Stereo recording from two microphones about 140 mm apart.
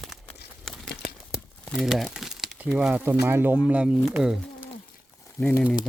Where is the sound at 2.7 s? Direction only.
10° right (ahead or behind).